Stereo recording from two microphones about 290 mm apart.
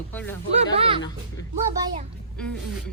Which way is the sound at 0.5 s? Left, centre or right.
Right.